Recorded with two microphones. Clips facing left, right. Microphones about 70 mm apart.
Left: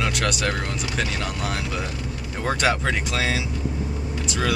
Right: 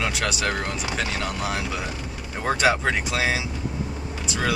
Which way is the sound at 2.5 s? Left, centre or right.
Centre.